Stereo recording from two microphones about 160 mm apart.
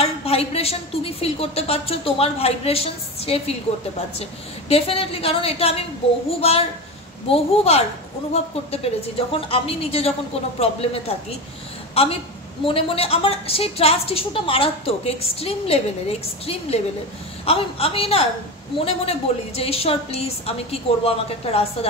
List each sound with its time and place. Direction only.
0.0 s a woman's voice: 40° left (ahead or behind)
7.2 s a woman's voice: 40° left (ahead or behind)